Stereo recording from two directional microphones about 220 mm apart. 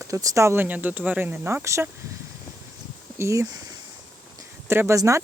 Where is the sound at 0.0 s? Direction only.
15° right (ahead or behind).